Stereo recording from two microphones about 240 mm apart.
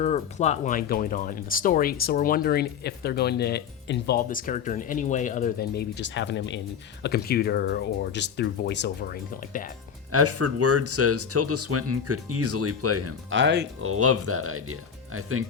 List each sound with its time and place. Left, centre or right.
0.0 s speech: left
10.1 s speech: right
13.3 s speech: right
13.8 s speech: right